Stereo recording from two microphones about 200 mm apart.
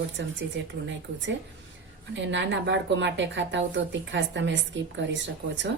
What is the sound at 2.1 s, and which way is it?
A woman's voice, 65° right (ahead or behind).